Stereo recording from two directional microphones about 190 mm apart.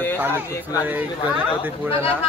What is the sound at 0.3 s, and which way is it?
Speech, 15° left (ahead or behind).